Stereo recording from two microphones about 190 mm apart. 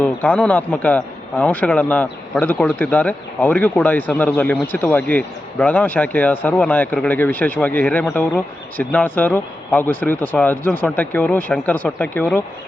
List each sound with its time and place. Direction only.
0.0 s a man's voice: 10° left (ahead or behind)